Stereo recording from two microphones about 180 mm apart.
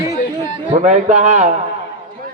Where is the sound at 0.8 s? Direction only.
40° right (ahead or behind).